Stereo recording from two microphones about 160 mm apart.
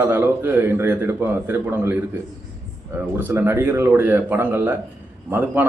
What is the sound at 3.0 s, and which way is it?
A man's voice, 10° right (ahead or behind).